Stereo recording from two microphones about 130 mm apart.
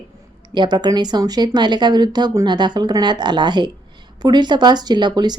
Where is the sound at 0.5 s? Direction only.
35° right (ahead or behind).